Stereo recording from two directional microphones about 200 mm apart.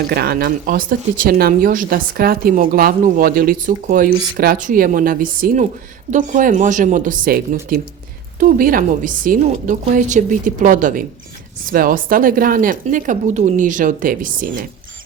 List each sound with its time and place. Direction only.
0.1 s a woman's voice: 50° right (ahead or behind)